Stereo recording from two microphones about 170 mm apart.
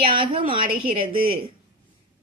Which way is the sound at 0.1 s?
30° right (ahead or behind).